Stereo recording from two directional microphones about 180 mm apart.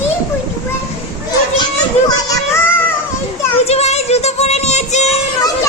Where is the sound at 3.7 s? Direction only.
35° left (ahead or behind).